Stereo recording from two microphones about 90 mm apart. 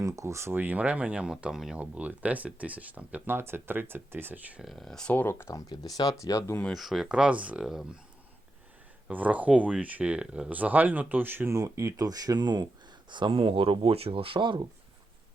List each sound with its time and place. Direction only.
0.0 s speech: 35° right (ahead or behind); by 1.8 s 5° right (ahead or behind)
1.8 s speech: 15° right (ahead or behind)
4.6 s speech: centre (ahead or behind)
5.1 s speech: 25° left (ahead or behind)
5.6 s speech: 50° left (ahead or behind)
6.7 s speech: centre (ahead or behind)
9.0 s speech: 15° right (ahead or behind)
11.5 s speech: 35° right (ahead or behind); by 14.7 s 65° right (ahead or behind)